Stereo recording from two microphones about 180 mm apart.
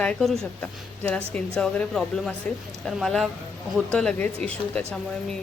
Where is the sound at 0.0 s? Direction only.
5° left (ahead or behind).